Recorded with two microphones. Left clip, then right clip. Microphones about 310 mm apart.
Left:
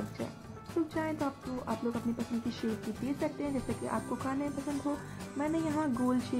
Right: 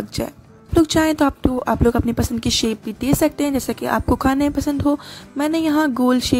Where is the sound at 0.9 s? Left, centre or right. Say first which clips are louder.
Right 17 dB; right.